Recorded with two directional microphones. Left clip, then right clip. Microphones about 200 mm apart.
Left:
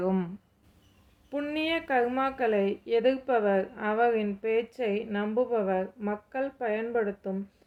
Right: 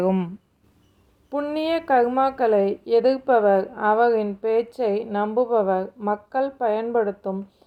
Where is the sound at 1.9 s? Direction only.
15° right (ahead or behind).